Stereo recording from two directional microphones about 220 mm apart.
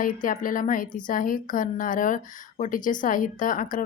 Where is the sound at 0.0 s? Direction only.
40° left (ahead or behind).